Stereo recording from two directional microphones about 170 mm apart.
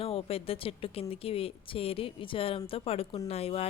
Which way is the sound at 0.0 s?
35° left (ahead or behind).